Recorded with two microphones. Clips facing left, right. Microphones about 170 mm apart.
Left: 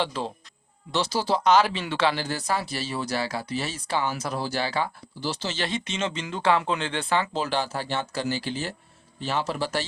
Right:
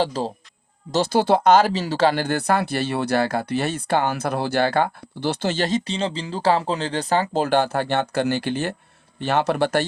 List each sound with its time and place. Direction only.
0.0 s speech: 40° right (ahead or behind); by 9.8 s 60° right (ahead or behind)